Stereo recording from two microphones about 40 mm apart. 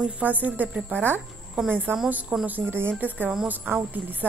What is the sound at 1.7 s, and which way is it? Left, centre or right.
A woman's voice, right.